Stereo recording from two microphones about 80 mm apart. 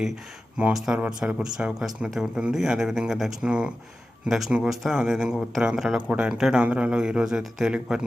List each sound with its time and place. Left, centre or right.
0.5 s speech: centre
0.9 s speech: centre
1.4 s speech: centre